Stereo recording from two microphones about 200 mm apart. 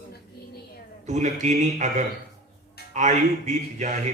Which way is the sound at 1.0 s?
35° right (ahead or behind).